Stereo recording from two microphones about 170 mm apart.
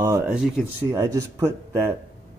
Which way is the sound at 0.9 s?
20° right (ahead or behind).